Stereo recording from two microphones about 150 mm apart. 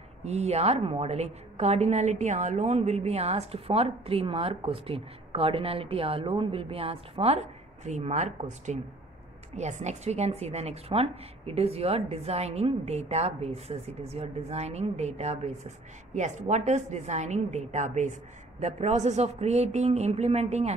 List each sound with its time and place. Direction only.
0.2 s a woman's voice: 45° right (ahead or behind)
7.8 s a woman's voice: 50° right (ahead or behind)